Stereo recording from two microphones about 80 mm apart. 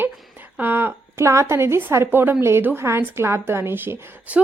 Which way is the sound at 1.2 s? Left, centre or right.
Right.